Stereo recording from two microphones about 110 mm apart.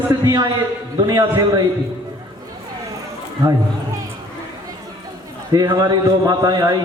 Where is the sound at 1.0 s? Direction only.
35° right (ahead or behind).